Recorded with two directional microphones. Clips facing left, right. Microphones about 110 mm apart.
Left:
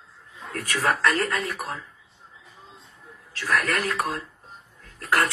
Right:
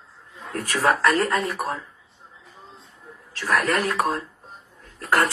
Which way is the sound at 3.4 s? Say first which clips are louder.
Right 3 dB; 40° right (ahead or behind).